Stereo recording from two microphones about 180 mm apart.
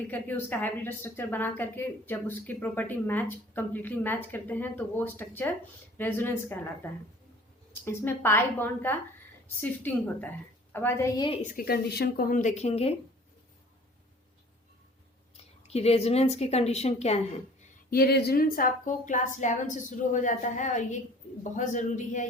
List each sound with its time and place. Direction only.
0.1 s speech: 10° left (ahead or behind)
7.9 s speech: 15° left (ahead or behind)
11.5 s a woman's voice: 60° left (ahead or behind); by 13.0 s 35° left (ahead or behind)
15.6 s a woman's voice: 35° left (ahead or behind)
17.9 s a woman's voice: 60° left (ahead or behind); by 22.3 s 45° left (ahead or behind)